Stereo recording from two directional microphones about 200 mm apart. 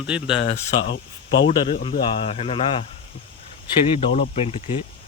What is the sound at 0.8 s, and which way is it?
Speech, 65° left (ahead or behind).